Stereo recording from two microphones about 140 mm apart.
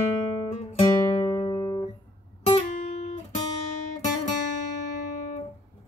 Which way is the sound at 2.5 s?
45° left (ahead or behind).